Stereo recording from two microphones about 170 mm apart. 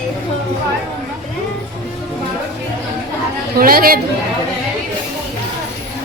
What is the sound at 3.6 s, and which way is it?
Speech, 60° right (ahead or behind).